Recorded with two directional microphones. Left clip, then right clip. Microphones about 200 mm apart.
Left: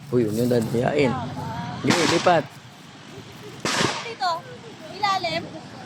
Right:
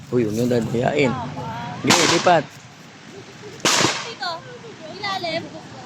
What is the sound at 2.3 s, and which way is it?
Speech, centre (ahead or behind).